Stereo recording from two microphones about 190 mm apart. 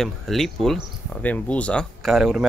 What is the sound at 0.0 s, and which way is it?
Speech, centre (ahead or behind).